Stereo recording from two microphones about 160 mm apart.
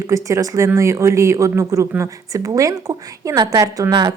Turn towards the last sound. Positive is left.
turn(degrees=-25)  # may be behind; listen again after turning